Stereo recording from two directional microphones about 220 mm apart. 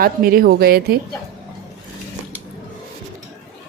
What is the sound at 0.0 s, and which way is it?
Speech, 40° right (ahead or behind).